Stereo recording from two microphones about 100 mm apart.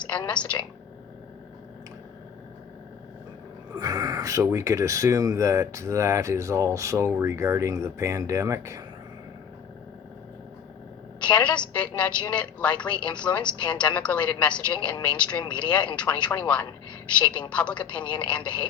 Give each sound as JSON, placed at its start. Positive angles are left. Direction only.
{"t": 0.3, "sound": "a woman's voice", "side_deg": 10}
{"t": 3.8, "sound": "speech", "side_deg": -35}
{"t": 11.2, "sound": "a woman's voice", "side_deg": 10}